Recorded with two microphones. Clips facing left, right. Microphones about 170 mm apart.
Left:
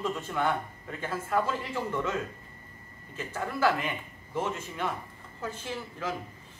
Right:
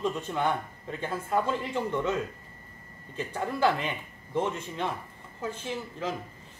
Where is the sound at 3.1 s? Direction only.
20° right (ahead or behind).